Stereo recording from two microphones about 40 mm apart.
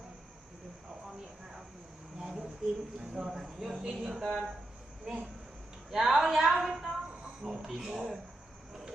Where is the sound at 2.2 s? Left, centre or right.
Centre.